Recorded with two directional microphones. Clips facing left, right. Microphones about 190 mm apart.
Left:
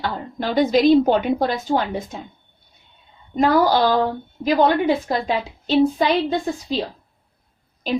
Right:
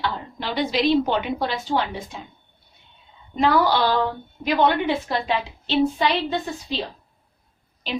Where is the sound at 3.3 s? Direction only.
40° left (ahead or behind).